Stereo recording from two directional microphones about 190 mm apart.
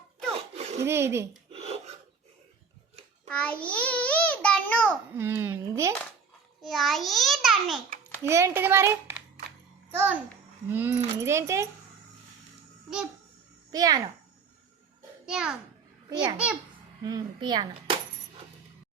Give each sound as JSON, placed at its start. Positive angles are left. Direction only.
{"t": 0.3, "sound": "a sound", "side_deg": -35}
{"t": 0.8, "sound": "a woman's voice", "side_deg": -15}
{"t": 1.5, "sound": "filing", "side_deg": -35}
{"t": 3.2, "sound": "a sound", "side_deg": 5}
{"t": 5.1, "sound": "a woman's voice", "side_deg": -10}
{"t": 6.6, "sound": "a child's voice", "side_deg": 0}
{"t": 8.2, "sound": "a child's voice", "side_deg": -15}
{"t": 13.7, "sound": "a child's voice", "side_deg": -20}
{"t": 15.3, "sound": "a child's voice", "side_deg": -5}
{"t": 16.0, "sound": "a child's voice", "side_deg": -25}